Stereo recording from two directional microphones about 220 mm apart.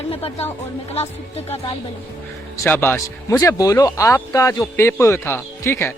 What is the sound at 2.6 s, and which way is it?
Speech, 10° left (ahead or behind).